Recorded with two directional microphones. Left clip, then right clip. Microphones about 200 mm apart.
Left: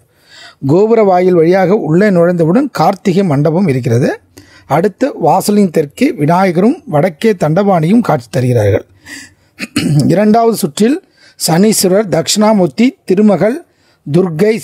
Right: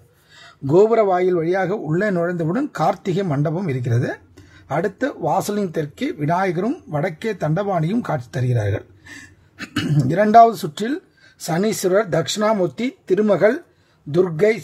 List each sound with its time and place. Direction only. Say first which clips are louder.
0.4 s a man's voice: left 4 dB; 40° left (ahead or behind)